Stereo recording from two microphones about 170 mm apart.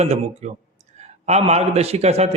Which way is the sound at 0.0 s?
40° right (ahead or behind).